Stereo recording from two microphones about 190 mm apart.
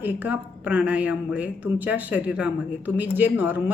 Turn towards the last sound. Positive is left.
turn(degrees=-10)  # may be behind; listen again after turning